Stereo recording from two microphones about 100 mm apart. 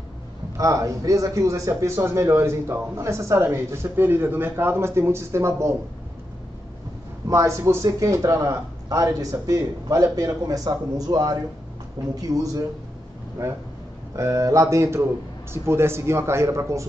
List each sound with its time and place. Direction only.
0.6 s a man's voice: 35° right (ahead or behind)
7.2 s speech: 30° right (ahead or behind)
14.1 s a man's voice: 30° right (ahead or behind)